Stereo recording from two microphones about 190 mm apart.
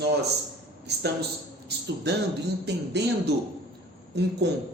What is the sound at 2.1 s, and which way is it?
Speech, 60° right (ahead or behind).